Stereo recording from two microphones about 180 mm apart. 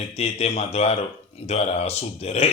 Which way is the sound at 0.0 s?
35° left (ahead or behind).